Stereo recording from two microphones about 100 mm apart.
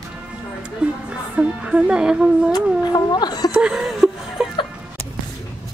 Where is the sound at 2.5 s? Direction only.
45° left (ahead or behind).